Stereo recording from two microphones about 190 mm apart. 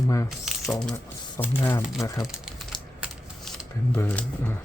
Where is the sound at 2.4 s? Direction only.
Centre (ahead or behind).